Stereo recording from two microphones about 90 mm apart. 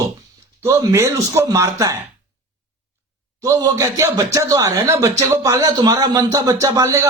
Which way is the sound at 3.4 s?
35° right (ahead or behind).